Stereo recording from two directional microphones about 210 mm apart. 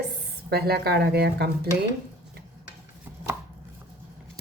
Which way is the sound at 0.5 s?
50° right (ahead or behind).